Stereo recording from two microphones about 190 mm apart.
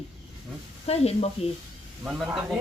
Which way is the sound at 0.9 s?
35° left (ahead or behind).